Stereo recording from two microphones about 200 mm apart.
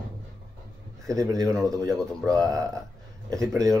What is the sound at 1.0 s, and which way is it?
Speech, 15° right (ahead or behind).